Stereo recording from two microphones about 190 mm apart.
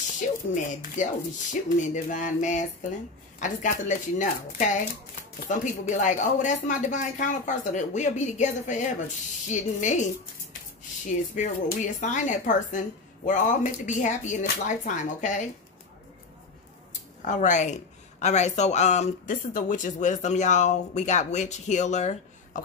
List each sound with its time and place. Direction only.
0.6 s speech: 40° left (ahead or behind)
11.3 s speech: 40° left (ahead or behind)
17.2 s speech: 40° left (ahead or behind)